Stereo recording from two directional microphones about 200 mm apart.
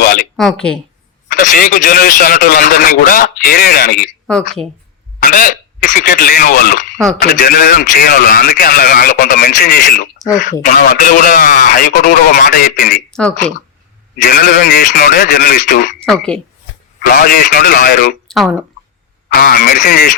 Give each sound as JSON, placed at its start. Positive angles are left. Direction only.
{"t": 0.3, "sound": "speech", "side_deg": 0}
{"t": 1.3, "sound": "a man's voice", "side_deg": 45}
{"t": 5.2, "sound": "a man's voice", "side_deg": 40}
{"t": 6.9, "sound": "speech", "side_deg": 0}
{"t": 7.2, "sound": "a man's voice", "side_deg": 45}
{"t": 13.1, "sound": "speech", "side_deg": 5}
{"t": 14.2, "sound": "a man's voice", "side_deg": 45}
{"t": 16.0, "sound": "a woman's voice", "side_deg": 5}
{"t": 17.1, "sound": "a man's voice", "side_deg": 45}
{"t": 18.3, "sound": "a sound", "side_deg": 0}
{"t": 19.3, "sound": "a man's voice", "side_deg": 45}